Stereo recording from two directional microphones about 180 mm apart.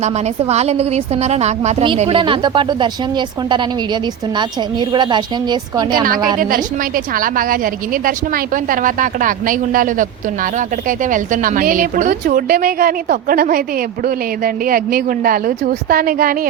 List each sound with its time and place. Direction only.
0.0 s a woman's voice: 35° right (ahead or behind)
6.4 s a woman's voice: 50° right (ahead or behind)